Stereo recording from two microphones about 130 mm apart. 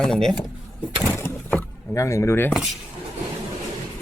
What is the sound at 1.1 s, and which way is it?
Vehicle, 15° left (ahead or behind).